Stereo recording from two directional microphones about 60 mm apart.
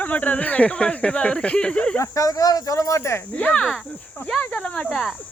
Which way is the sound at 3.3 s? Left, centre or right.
Centre.